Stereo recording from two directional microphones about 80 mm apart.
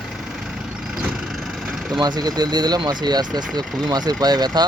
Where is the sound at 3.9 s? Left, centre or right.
Right.